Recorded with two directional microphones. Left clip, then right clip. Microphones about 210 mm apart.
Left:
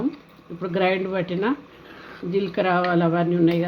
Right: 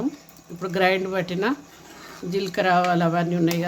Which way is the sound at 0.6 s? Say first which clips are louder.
Right 1 dB; centre (ahead or behind).